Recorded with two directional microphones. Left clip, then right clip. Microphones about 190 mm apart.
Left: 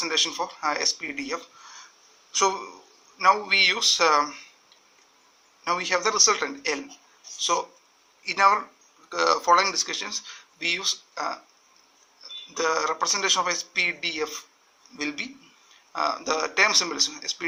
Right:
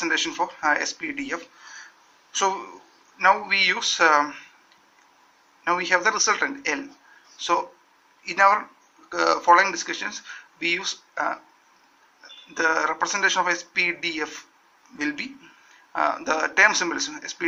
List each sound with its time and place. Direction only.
0.0 s speech: 25° left (ahead or behind)
5.6 s speech: 30° left (ahead or behind)
12.5 s speech: 25° left (ahead or behind)